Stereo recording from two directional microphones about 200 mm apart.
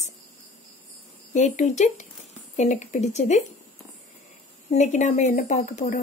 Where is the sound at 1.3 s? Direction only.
35° left (ahead or behind).